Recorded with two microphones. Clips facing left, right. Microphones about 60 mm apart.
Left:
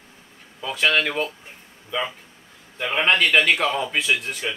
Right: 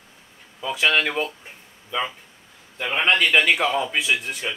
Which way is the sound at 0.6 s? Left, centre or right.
Centre.